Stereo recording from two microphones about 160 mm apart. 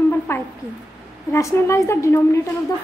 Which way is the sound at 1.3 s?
15° left (ahead or behind).